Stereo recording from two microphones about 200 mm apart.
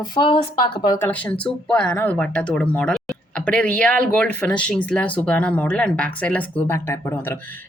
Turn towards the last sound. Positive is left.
turn(degrees=10)  # may be behind; listen again after turning